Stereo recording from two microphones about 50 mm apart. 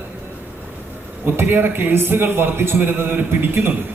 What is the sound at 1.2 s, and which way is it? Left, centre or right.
A man's voice, right.